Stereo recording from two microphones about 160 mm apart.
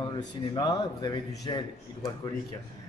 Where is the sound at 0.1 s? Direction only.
30° left (ahead or behind).